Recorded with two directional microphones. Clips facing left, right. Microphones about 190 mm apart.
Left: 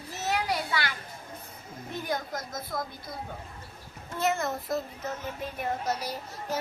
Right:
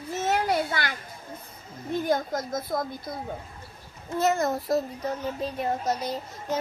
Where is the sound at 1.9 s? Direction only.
50° right (ahead or behind).